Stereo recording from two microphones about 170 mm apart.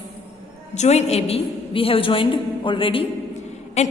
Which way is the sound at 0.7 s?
40° left (ahead or behind).